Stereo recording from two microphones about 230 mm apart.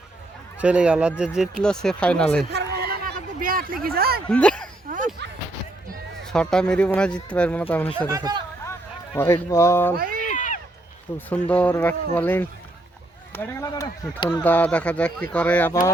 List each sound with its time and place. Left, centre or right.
0.6 s speech: centre
2.7 s a sound: right
3.8 s speech: right
4.3 s speech: centre
4.9 s a sound: right
6.2 s speech: centre
7.9 s speech: centre
9.1 s speech: centre
10.3 s a sound: left
11.3 s speech: centre